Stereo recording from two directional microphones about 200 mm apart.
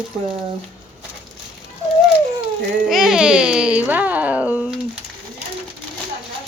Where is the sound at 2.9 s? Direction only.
Centre (ahead or behind).